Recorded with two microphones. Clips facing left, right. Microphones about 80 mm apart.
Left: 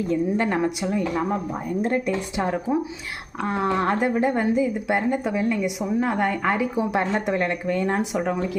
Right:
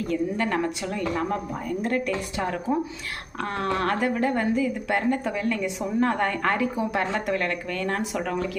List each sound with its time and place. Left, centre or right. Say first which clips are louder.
0.1 s speech: left 2 dB; left
6.7 s speech: left 3 dB; left